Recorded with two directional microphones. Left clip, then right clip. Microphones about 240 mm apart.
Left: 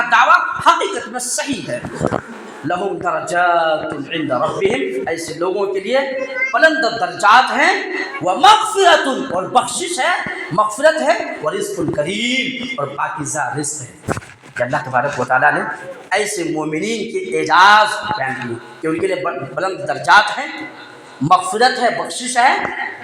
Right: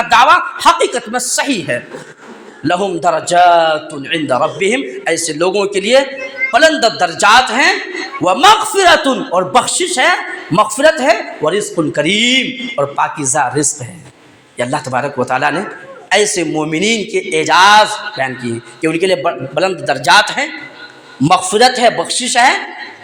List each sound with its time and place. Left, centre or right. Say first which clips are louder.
0.1 s a man's voice: right 4 dB; right
12.7 s a man's voice: right 8 dB; right
18.8 s a man's voice: right 5 dB; right